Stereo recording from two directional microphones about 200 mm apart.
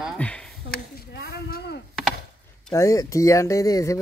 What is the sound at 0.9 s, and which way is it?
Speech, 55° left (ahead or behind).